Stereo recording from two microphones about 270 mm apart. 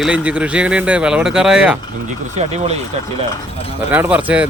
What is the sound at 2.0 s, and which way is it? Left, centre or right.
Speech, right.